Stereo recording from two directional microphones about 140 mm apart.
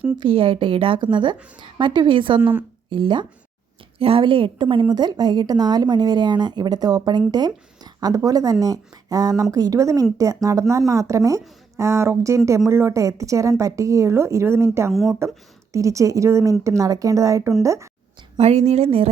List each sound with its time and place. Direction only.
0.2 s a woman's voice: 40° right (ahead or behind)
2.4 s speech: 15° right (ahead or behind)
2.9 s a woman's voice: 35° right (ahead or behind)
18.3 s speech: 50° right (ahead or behind)